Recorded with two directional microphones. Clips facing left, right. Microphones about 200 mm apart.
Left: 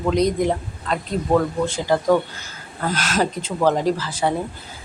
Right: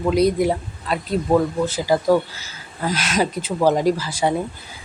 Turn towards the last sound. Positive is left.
turn(degrees=-10)  # may be behind; listen again after turning